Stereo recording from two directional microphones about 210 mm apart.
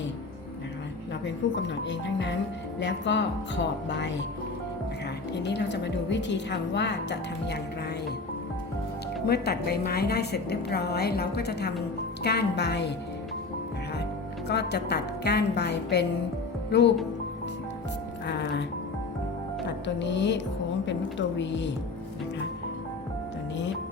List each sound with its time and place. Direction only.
1.2 s a woman's voice: 60° left (ahead or behind)
5.3 s a woman's voice: 55° left (ahead or behind)
9.2 s a woman's voice: 50° left (ahead or behind)
14.4 s a woman's voice: 50° left (ahead or behind)
18.3 s music: 55° left (ahead or behind)
19.6 s a woman's voice: 60° left (ahead or behind)